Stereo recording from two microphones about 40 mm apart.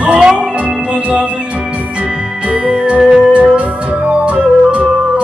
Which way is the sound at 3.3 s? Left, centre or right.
Right.